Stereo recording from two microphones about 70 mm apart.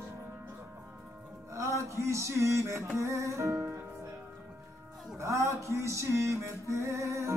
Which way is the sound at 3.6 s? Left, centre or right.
Right.